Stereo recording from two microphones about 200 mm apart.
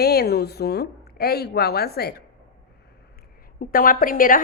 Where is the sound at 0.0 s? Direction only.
50° left (ahead or behind).